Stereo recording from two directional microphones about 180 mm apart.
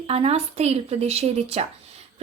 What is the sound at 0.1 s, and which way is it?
A woman's voice, 35° right (ahead or behind).